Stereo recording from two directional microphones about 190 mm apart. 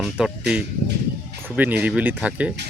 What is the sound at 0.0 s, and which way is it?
Speech, 5° right (ahead or behind).